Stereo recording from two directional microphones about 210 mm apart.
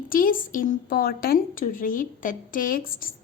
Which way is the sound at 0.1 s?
40° left (ahead or behind).